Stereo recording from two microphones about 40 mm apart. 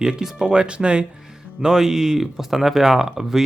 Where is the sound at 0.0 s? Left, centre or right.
Centre.